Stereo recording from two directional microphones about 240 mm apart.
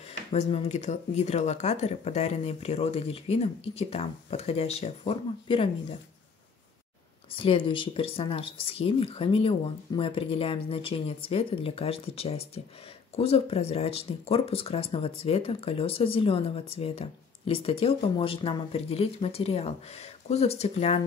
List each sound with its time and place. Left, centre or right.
0.0 s speech: left
7.2 s speech: left